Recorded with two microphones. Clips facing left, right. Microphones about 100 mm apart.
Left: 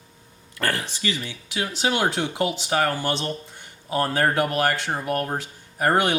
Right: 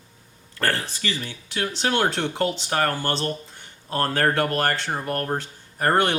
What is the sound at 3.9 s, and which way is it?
Speech, 10° left (ahead or behind).